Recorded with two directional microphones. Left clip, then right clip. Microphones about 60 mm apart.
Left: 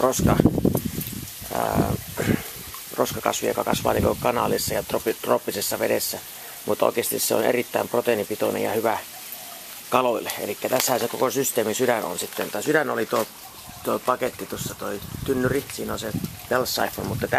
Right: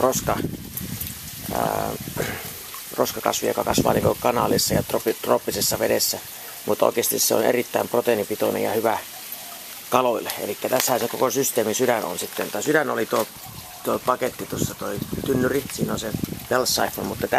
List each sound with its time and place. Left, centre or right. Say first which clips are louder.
0.0 s speech: even; centre
1.5 s speech: even; centre
10.1 s speech: right 1 dB; centre
16.6 s speech: right 2 dB; right